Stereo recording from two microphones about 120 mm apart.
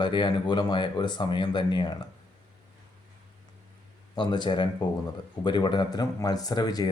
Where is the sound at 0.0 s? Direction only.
40° left (ahead or behind).